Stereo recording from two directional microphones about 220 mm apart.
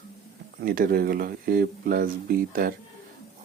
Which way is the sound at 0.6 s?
40° right (ahead or behind).